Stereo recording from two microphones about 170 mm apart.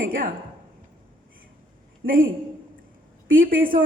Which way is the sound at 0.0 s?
55° right (ahead or behind).